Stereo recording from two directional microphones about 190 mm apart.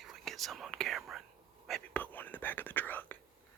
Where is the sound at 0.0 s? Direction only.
Centre (ahead or behind).